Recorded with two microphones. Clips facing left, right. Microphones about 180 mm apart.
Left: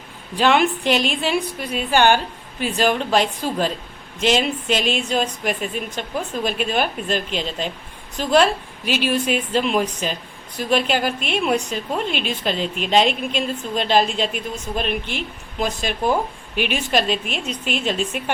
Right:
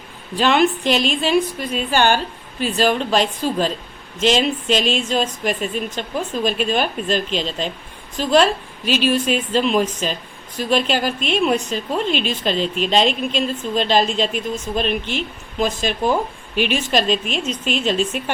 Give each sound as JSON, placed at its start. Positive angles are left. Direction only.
{"t": 0.3, "sound": "a woman's voice", "side_deg": 15}